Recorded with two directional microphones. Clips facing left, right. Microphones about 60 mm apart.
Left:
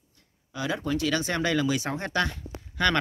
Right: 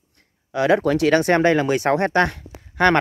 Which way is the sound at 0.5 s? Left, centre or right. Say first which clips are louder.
Right 11 dB; right.